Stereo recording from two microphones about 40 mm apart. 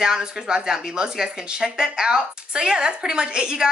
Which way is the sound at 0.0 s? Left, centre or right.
Centre.